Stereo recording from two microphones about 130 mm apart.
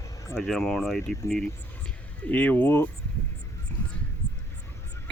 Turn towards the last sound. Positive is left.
turn(degrees=15)  # may be behind; listen again after turning